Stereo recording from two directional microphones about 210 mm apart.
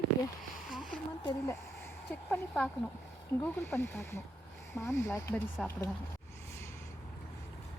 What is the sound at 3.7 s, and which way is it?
Speech, 10° left (ahead or behind).